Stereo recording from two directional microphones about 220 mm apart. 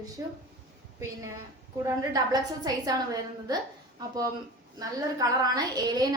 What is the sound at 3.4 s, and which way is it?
A woman's voice, 15° right (ahead or behind).